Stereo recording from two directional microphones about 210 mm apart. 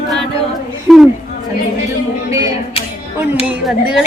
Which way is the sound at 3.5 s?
5° right (ahead or behind).